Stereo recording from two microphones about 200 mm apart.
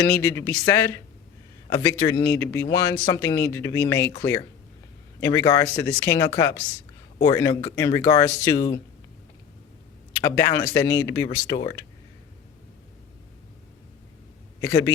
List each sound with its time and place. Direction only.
0.0 s speech: 10° left (ahead or behind)
10.3 s speech: 15° left (ahead or behind)
14.6 s speech: 10° left (ahead or behind)